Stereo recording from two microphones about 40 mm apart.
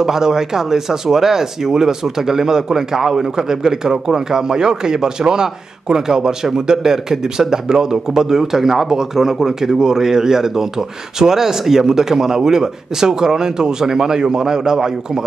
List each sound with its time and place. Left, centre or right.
0.0 s speech: centre